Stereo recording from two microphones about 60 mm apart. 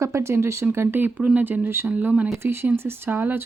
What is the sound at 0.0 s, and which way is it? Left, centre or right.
Speech, right.